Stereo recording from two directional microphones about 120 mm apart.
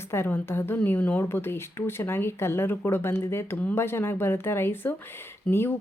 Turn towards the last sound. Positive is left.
turn(degrees=10)  # may be behind; listen again after turning